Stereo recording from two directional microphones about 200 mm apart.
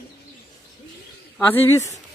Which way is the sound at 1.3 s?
10° left (ahead or behind).